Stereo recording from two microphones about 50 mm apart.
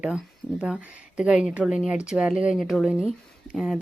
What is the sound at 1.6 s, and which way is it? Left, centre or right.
Speech, centre.